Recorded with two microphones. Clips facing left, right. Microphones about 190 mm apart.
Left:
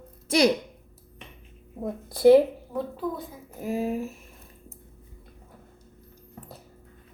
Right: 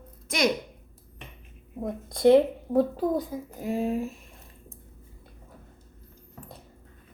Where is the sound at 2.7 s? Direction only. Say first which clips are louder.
Right 7 dB; 40° right (ahead or behind).